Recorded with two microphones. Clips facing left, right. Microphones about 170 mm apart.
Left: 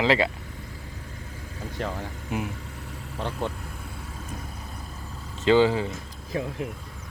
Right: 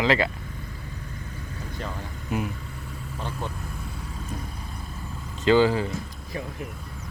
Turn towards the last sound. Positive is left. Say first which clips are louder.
# left 4 dB
turn(degrees=90)